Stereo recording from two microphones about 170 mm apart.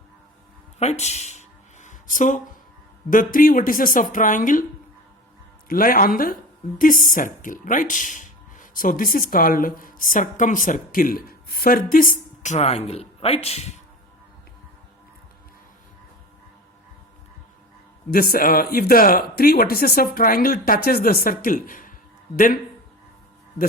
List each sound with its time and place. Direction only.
0.8 s a sound: 40° left (ahead or behind)
3.1 s speech: 55° left (ahead or behind)
5.6 s speech: 55° left (ahead or behind); by 13.7 s 40° left (ahead or behind)
18.1 s speech: 60° left (ahead or behind)